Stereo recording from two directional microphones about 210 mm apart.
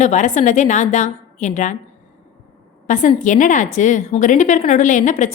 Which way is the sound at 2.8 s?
35° left (ahead or behind).